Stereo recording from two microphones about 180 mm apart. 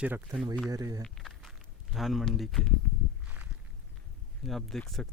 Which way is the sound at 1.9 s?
Centre (ahead or behind).